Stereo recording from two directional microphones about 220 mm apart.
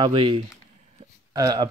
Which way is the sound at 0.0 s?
25° right (ahead or behind).